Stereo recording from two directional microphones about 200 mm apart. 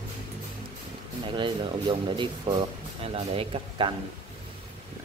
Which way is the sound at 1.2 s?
25° right (ahead or behind).